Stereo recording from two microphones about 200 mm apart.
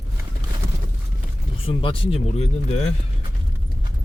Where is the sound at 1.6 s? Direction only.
25° left (ahead or behind).